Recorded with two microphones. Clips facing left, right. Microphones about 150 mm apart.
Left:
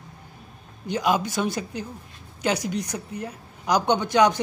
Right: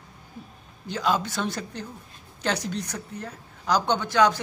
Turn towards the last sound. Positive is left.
turn(degrees=15)  # may be behind; listen again after turning